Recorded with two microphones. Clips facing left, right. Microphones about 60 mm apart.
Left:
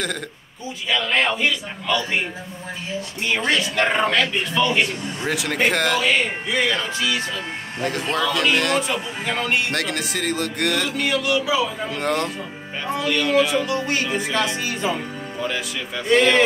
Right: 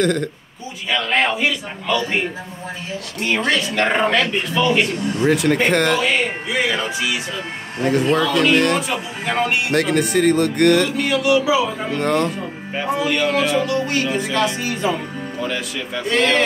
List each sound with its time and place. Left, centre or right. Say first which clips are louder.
0.0 s music: right 9 dB; centre
0.8 s a man's voice: right 2 dB; centre
3.3 s music: right 2 dB; centre
7.8 s music: right 6 dB; centre
12.7 s a man's voice: right 3 dB; centre
13.3 s music: even; centre
14.3 s speech: right 3 dB; right
15.4 s a man's voice: right 1 dB; centre